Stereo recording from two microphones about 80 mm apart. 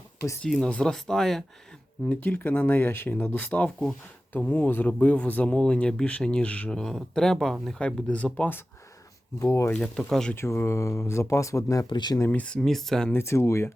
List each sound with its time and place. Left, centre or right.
0.6 s speech: centre
2.0 s speech: centre
9.4 s speech: left
9.7 s speech: centre
10.3 s speech: left
11.9 s speech: left
12.3 s speech: centre
12.5 s speech: centre
13.1 s speech: left